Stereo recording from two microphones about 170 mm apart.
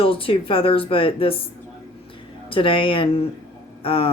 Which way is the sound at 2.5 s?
30° left (ahead or behind).